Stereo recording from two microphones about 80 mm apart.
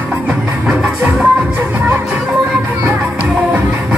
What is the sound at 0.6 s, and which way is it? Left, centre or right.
Music, centre.